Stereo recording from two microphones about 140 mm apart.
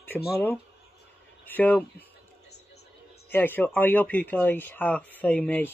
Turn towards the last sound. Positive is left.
turn(degrees=10)  # may be behind; listen again after turning